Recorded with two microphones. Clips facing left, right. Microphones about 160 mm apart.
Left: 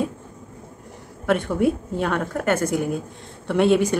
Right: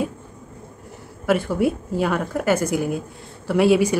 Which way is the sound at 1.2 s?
5° right (ahead or behind).